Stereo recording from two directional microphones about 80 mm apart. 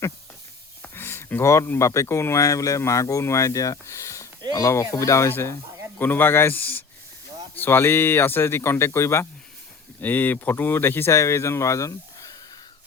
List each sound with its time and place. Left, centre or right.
0.8 s a sound: left
1.9 s speech: left
10.0 s speech: left
11.1 s speech: left